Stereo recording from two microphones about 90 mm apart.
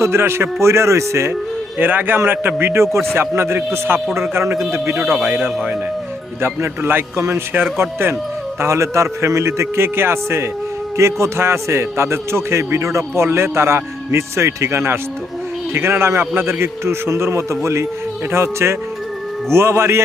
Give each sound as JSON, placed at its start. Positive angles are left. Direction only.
{"t": 0.0, "sound": "a man's voice", "side_deg": -25}
{"t": 4.9, "sound": "a man's voice", "side_deg": -5}
{"t": 6.4, "sound": "a man's voice", "side_deg": -25}